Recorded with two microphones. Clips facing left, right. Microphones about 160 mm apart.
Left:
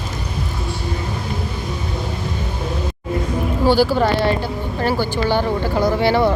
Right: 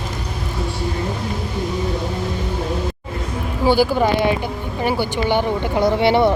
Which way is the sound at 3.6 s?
15° right (ahead or behind).